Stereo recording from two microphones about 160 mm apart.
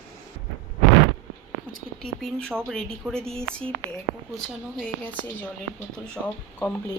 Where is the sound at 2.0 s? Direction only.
5° left (ahead or behind).